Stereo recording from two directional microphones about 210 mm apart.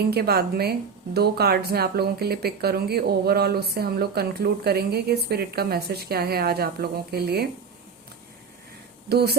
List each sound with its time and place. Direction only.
0.1 s speech: 50° right (ahead or behind)
9.0 s speech: 50° right (ahead or behind)